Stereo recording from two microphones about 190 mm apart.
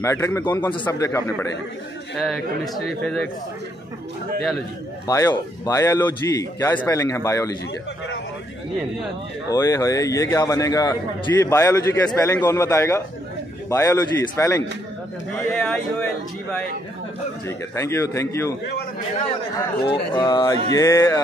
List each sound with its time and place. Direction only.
0.0 s a man's voice: 15° left (ahead or behind)
2.1 s a man's voice: centre (ahead or behind)
5.0 s a man's voice: 20° left (ahead or behind)
9.5 s a man's voice: 15° left (ahead or behind)
15.3 s a man's voice: 5° left (ahead or behind)
17.5 s a man's voice: 15° left (ahead or behind)
19.9 s a man's voice: 25° left (ahead or behind)